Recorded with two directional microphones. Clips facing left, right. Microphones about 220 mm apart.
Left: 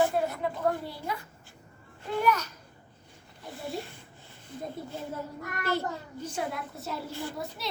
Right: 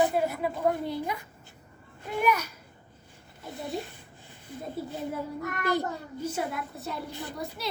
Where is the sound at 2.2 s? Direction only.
10° right (ahead or behind).